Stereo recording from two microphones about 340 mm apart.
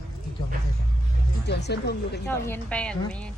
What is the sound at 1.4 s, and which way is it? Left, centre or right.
Speech, left.